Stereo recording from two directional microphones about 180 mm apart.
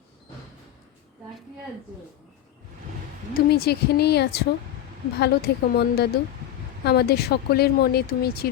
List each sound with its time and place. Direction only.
3.3 s speech: 60° left (ahead or behind)